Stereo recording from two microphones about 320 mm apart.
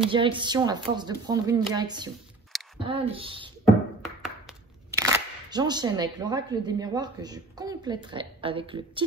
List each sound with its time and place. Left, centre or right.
0.1 s speech: centre
4.0 s speech: centre